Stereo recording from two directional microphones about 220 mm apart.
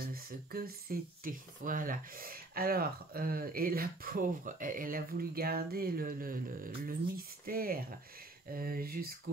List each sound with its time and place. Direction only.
0.0 s speech: 45° right (ahead or behind)